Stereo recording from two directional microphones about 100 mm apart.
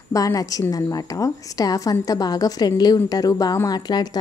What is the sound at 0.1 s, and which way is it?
Speech, 35° left (ahead or behind).